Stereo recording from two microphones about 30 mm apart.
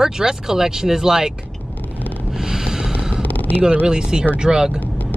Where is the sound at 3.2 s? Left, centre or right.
Left.